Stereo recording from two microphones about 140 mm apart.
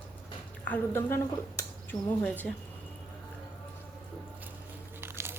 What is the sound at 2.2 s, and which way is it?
Speech, 10° left (ahead or behind).